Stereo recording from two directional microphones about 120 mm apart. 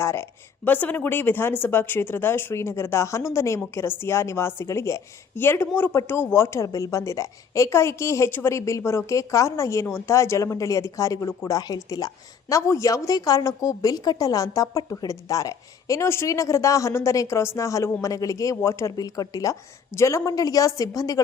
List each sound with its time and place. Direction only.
0.0 s speech: 20° left (ahead or behind)